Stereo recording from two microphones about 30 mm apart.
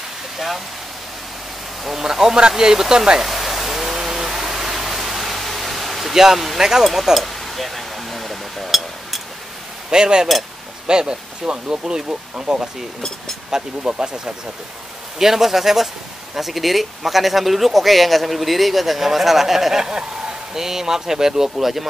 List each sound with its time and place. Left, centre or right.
2.0 s speech: centre
3.2 s pink noise: centre
6.1 s speech: centre
7.2 s a sound: centre
9.8 s speech: right
15.1 s speech: centre
19.8 s speech: right